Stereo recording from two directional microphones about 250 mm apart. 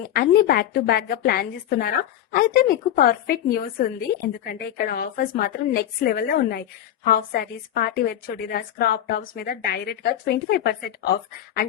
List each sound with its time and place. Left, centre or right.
0.1 s a woman's voice: left